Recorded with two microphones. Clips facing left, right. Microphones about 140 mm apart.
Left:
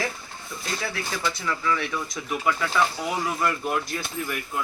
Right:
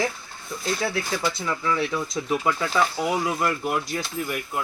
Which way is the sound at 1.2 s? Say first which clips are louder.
Right 1 dB; 20° right (ahead or behind).